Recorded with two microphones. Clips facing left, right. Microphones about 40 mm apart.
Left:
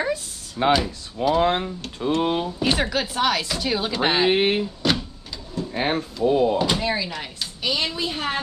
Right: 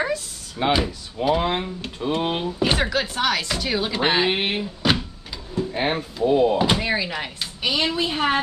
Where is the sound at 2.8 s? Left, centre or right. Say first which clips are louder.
Even; centre.